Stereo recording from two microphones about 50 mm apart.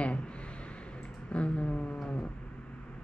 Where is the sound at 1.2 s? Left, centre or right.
Left.